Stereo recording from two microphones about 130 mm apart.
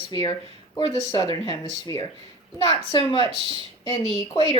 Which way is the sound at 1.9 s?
25° left (ahead or behind).